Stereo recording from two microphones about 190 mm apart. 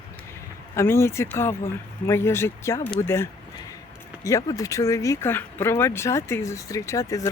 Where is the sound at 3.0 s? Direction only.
15° left (ahead or behind).